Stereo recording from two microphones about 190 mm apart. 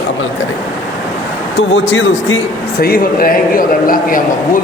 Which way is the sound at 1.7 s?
85° left.